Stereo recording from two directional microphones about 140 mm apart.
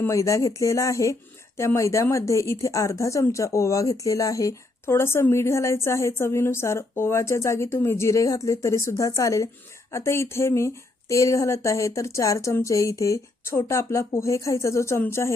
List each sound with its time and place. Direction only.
0.0 s speech: 20° left (ahead or behind)